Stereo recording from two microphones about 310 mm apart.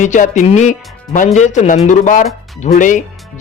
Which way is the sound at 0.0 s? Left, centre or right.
Left.